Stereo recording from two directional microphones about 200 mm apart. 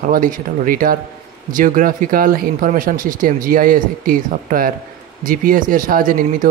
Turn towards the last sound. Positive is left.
turn(degrees=-45)  # may be behind; listen again after turning